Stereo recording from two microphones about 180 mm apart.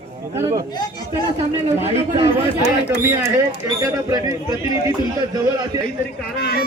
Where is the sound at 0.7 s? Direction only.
20° left (ahead or behind).